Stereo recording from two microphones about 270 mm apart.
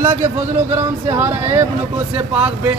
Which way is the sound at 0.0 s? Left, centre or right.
Centre.